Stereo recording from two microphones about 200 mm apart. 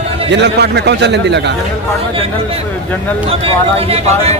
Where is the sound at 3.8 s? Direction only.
30° right (ahead or behind).